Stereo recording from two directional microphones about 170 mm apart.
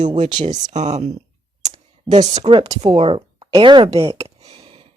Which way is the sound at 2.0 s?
25° right (ahead or behind).